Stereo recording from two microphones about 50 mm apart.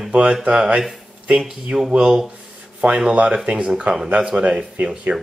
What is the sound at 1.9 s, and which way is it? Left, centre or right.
Speech, centre.